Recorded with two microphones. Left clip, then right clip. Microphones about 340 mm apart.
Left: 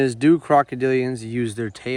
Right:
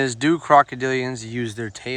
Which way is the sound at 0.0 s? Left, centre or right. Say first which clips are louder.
Left 3 dB; centre.